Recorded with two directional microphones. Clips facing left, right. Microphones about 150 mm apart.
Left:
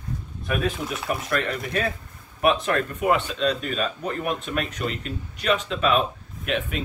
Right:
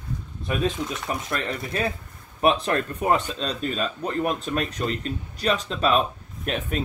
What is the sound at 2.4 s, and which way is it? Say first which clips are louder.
Speech: even; 35° right (ahead or behind).